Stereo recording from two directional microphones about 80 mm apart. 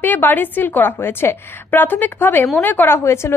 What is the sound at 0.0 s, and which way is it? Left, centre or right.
A woman's voice, left.